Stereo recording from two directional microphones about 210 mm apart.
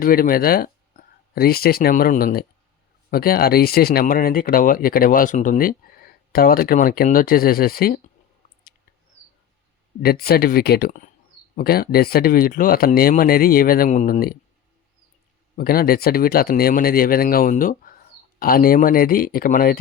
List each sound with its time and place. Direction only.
0.0 s speech: 45° left (ahead or behind)
10.0 s speech: 45° left (ahead or behind)
15.5 s speech: 45° left (ahead or behind)